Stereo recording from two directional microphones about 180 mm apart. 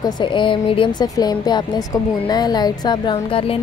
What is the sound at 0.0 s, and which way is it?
A woman's voice, 25° left (ahead or behind).